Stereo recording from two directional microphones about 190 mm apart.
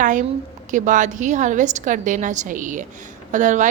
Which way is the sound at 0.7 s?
40° right (ahead or behind).